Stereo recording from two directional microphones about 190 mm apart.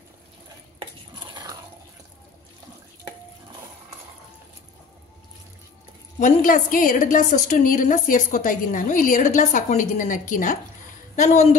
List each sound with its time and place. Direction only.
1.2 s dog: 20° right (ahead or behind)
6.1 s a woman's voice: 45° left (ahead or behind)